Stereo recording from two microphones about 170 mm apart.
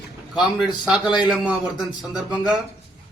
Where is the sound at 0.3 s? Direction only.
Centre (ahead or behind).